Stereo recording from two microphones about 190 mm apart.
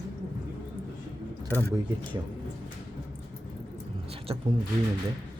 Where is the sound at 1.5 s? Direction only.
10° left (ahead or behind).